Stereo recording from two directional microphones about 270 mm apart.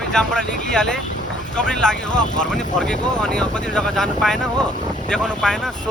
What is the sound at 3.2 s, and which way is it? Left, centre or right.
Speech, centre.